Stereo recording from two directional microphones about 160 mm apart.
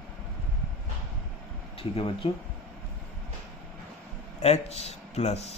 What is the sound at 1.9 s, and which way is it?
Speech, 35° left (ahead or behind).